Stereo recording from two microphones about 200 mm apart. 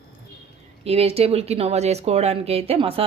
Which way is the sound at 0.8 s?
30° right (ahead or behind).